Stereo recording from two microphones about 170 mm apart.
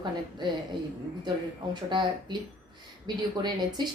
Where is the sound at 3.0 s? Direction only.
25° right (ahead or behind).